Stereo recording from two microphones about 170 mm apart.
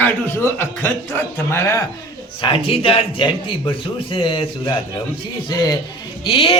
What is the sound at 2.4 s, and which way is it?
Speech, 30° left (ahead or behind).